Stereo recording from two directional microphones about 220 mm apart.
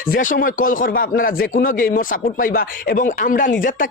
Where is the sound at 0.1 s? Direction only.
40° left (ahead or behind).